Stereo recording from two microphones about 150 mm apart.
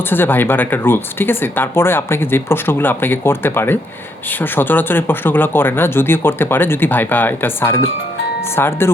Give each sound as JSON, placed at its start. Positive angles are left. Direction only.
{"t": 0.0, "sound": "speech", "side_deg": 15}